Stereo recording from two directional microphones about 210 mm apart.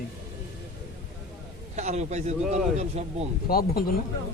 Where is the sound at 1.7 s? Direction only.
30° right (ahead or behind).